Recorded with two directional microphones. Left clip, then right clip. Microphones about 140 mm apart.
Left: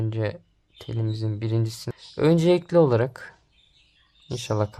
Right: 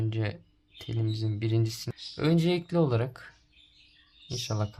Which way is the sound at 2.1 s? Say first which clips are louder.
Left 8 dB; 45° left (ahead or behind).